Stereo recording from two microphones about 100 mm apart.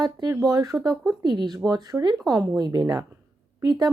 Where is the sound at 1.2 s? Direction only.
50° right (ahead or behind).